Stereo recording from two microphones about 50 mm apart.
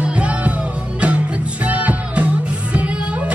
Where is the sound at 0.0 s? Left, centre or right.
Right.